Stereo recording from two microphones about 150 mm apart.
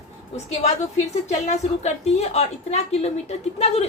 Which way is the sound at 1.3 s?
50° left (ahead or behind).